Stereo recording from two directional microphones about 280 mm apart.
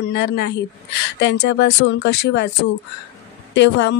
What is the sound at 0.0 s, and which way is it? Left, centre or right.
Speech, left.